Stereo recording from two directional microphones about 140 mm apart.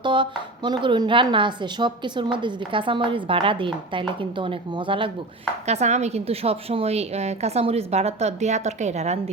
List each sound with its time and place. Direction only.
0.0 s a woman's voice: 35° right (ahead or behind)
5.6 s a woman's voice: 55° right (ahead or behind)